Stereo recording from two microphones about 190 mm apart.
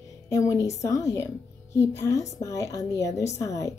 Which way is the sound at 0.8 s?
15° left (ahead or behind).